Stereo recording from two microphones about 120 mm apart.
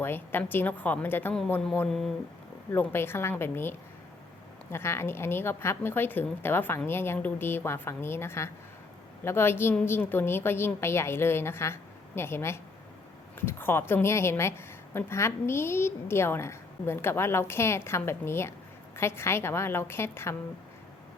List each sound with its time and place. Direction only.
0.0 s a woman's voice: 20° left (ahead or behind)
1.9 s speech: 5° left (ahead or behind)
2.7 s a woman's voice: 20° left (ahead or behind)